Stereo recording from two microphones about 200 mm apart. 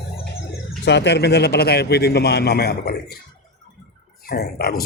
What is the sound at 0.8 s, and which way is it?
A man's voice, 60° left (ahead or behind).